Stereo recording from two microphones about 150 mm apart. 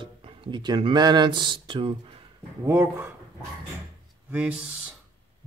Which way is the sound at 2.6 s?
15° right (ahead or behind).